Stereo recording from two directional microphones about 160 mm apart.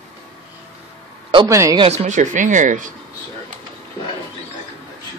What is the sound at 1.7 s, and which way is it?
Speech, 40° right (ahead or behind).